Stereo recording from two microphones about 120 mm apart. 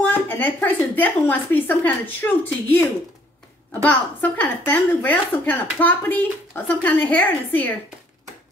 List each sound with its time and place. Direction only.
0.0 s a woman's voice: 15° left (ahead or behind)
3.8 s a woman's voice: 15° left (ahead or behind)